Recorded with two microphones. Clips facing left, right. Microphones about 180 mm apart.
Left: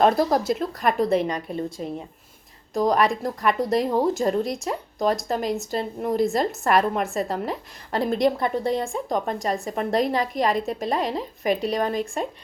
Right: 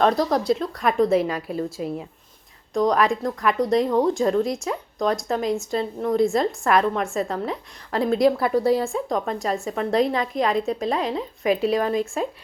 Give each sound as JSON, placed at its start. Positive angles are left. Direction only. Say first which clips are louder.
{"t": 0.3, "sound": "a woman's voice", "louder": "right 1 dB", "side_deg": 0}